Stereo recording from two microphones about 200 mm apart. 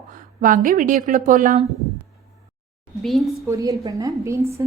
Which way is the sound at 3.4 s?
15° right (ahead or behind).